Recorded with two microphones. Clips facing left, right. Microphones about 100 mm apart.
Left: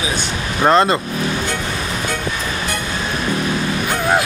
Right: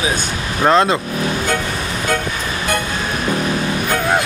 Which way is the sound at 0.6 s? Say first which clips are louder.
Even; centre (ahead or behind).